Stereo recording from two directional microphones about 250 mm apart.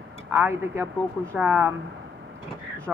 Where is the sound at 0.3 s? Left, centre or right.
Centre.